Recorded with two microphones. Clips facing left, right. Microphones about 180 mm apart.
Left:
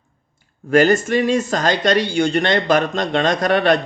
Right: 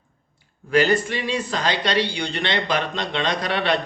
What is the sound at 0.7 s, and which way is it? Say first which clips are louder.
Speech: left 5 dB; 45° left (ahead or behind).